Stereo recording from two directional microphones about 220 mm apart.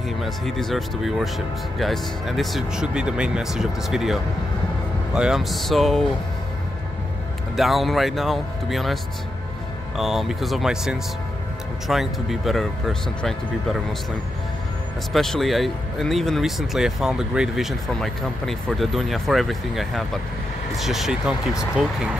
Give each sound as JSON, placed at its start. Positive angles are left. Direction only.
{"t": 0.2, "sound": "speech", "side_deg": 0}
{"t": 7.5, "sound": "speech", "side_deg": 0}
{"t": 9.9, "sound": "speech", "side_deg": 0}
{"t": 15.1, "sound": "speech", "side_deg": 0}